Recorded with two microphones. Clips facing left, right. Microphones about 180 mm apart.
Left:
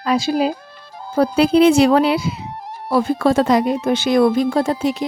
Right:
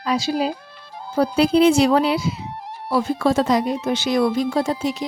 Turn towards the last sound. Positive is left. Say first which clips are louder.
# left 3 dB
turn(degrees=55)  # may be behind; listen again after turning